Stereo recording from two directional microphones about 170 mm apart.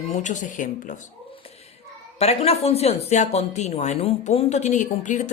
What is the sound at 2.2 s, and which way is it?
A woman's voice, 40° left (ahead or behind).